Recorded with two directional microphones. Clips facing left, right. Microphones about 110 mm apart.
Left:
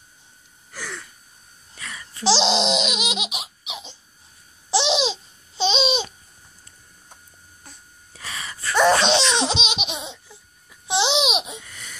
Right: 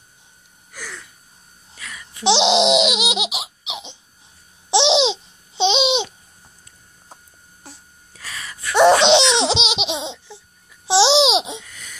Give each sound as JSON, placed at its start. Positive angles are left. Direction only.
{"t": 1.8, "sound": "a sound", "side_deg": 0}
{"t": 2.2, "sound": "a child's voice", "side_deg": -20}
{"t": 2.6, "sound": "laughter", "side_deg": -20}
{"t": 4.6, "sound": "babbling", "side_deg": -25}
{"t": 8.1, "sound": "gasp", "side_deg": 0}
{"t": 8.7, "sound": "laughter", "side_deg": -25}
{"t": 10.9, "sound": "babbling", "side_deg": -30}
{"t": 11.6, "sound": "laughter", "side_deg": 0}